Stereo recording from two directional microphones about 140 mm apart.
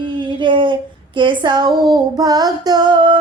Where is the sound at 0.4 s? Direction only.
35° right (ahead or behind).